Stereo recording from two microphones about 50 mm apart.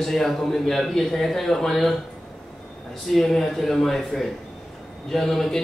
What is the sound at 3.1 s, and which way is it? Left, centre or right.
A man's voice, centre.